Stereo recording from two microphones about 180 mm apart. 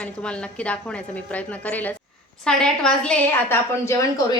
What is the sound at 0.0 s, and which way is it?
A woman's voice, 5° left (ahead or behind).